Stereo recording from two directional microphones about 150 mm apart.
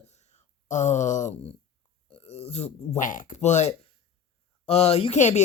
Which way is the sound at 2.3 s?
45° left (ahead or behind).